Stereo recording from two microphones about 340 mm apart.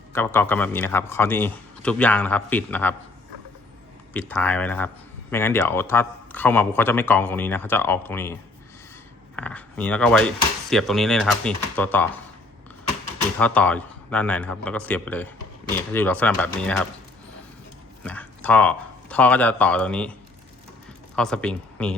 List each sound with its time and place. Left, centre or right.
0.1 s speech: centre
4.1 s speech: centre
13.4 s speech: centre
18.0 s speech: centre
21.2 s speech: centre